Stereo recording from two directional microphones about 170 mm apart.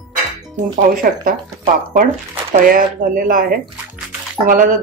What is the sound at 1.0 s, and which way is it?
Speech, 55° right (ahead or behind).